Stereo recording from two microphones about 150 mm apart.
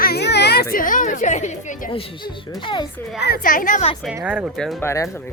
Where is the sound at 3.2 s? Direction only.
80° left.